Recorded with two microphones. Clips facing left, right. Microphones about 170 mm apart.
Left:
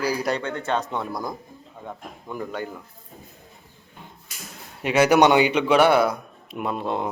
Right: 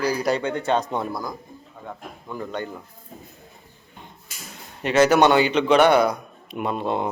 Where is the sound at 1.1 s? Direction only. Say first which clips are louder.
Even; 20° left (ahead or behind).